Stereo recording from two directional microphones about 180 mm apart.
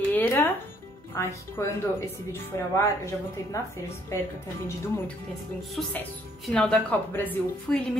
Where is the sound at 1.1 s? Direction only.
15° left (ahead or behind).